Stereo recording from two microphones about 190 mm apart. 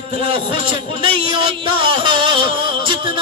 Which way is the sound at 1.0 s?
25° right (ahead or behind).